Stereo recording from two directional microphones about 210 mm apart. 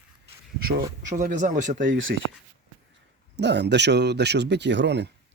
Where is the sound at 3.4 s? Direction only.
55° right (ahead or behind).